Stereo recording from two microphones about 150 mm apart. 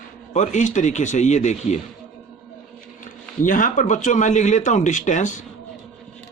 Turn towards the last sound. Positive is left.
turn(degrees=55)  # may be behind; listen again after turning